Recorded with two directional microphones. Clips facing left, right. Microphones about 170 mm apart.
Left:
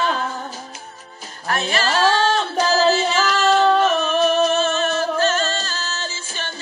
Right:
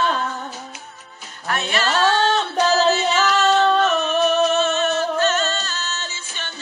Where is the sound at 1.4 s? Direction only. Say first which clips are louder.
Left 1 dB; 35° left (ahead or behind).